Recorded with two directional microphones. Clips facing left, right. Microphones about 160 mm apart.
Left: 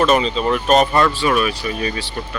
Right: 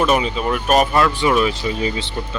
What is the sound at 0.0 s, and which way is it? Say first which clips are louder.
Speech: left 2 dB; 10° right (ahead or behind).